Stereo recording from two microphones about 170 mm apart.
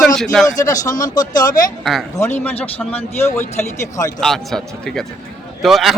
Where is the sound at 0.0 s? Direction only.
5° left (ahead or behind).